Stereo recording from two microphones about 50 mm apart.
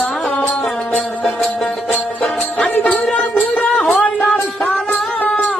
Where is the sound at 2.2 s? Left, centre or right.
Centre.